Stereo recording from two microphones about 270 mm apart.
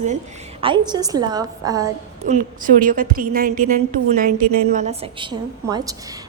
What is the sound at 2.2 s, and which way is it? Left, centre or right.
A woman's voice, right.